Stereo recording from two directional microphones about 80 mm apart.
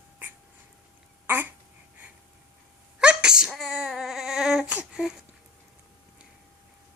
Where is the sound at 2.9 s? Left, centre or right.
Centre.